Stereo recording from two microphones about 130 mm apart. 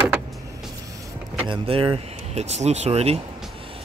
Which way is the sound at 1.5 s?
45° right (ahead or behind).